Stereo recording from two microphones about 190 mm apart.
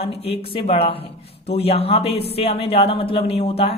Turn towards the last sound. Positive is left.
turn(degrees=35)  # may be behind; listen again after turning